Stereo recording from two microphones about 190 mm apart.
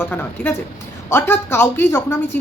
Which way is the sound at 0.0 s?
10° left (ahead or behind).